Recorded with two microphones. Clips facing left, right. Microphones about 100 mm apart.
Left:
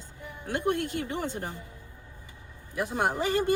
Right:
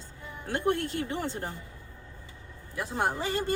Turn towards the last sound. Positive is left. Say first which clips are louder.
# left 3 dB
turn(degrees=15)  # may be behind; listen again after turning